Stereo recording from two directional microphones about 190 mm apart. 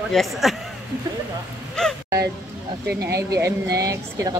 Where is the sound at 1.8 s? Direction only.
5° left (ahead or behind).